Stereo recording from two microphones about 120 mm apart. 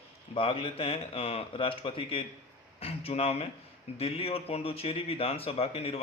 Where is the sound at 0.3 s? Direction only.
50° left (ahead or behind).